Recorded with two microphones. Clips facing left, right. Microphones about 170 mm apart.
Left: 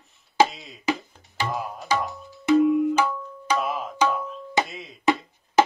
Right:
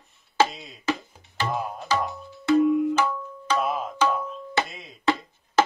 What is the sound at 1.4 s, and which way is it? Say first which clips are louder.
Music: right 1 dB; 5° left (ahead or behind).